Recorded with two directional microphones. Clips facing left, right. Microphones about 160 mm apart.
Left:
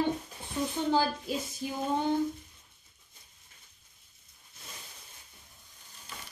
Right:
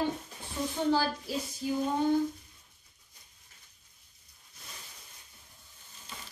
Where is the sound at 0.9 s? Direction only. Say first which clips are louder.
Left 2 dB; 20° left (ahead or behind).